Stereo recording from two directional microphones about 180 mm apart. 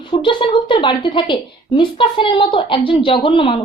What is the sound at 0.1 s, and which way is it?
Speech, 25° left (ahead or behind).